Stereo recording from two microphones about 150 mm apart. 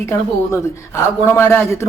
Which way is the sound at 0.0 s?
20° left (ahead or behind).